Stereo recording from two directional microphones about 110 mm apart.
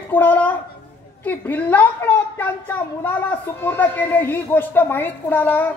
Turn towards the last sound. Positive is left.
turn(degrees=15)  # may be behind; listen again after turning